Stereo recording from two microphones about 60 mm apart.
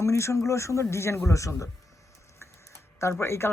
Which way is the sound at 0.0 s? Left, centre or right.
Left.